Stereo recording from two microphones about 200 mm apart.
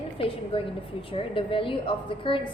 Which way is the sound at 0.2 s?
25° left (ahead or behind).